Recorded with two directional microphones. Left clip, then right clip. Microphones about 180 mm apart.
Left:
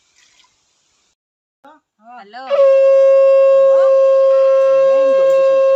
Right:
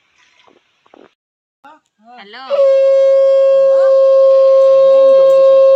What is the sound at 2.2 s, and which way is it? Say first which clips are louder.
Speech: right 1 dB; 60° left (ahead or behind).